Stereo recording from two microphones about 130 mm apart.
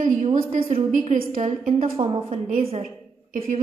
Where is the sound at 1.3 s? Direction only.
90° right.